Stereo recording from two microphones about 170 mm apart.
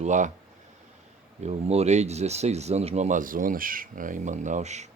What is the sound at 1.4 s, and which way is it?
Speech, 40° right (ahead or behind).